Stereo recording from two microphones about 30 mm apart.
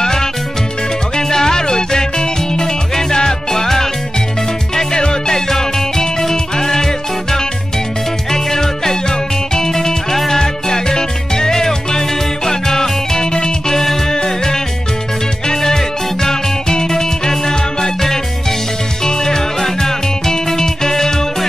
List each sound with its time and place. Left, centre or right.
0.0 s music: left
4.9 s music: left
13.7 s music: centre
19.0 s music: left